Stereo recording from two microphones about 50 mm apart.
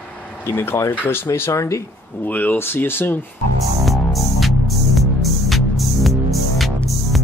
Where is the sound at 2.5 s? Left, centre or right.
Left.